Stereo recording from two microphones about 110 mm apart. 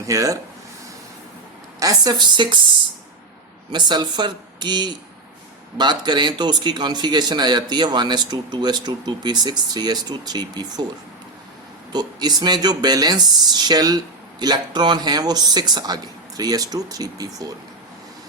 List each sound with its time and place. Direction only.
0.0 s a man's voice: 30° right (ahead or behind)
1.8 s a man's voice: 35° right (ahead or behind)
3.7 s a man's voice: 45° right (ahead or behind)
11.9 s a man's voice: 40° right (ahead or behind)